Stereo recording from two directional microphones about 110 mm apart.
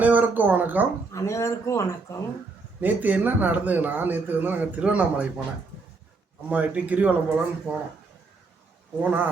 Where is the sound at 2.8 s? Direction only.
15° right (ahead or behind).